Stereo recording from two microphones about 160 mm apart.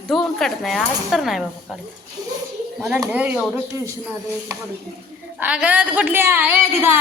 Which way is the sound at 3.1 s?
10° right (ahead or behind).